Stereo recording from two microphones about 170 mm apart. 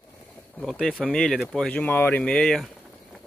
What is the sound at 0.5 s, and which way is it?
Speech, centre (ahead or behind).